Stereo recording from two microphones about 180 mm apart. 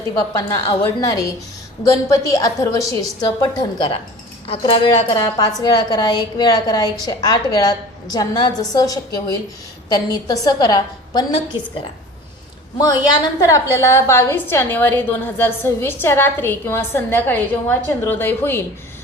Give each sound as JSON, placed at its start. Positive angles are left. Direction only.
{"t": 0.3, "sound": "a woman's voice", "side_deg": 20}
{"t": 13.4, "sound": "a woman's voice", "side_deg": 20}